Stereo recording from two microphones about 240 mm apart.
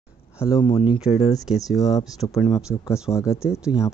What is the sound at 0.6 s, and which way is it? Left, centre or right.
Speech, centre.